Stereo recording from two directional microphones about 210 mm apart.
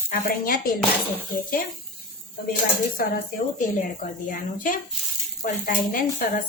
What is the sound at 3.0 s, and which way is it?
Speech, 45° left (ahead or behind).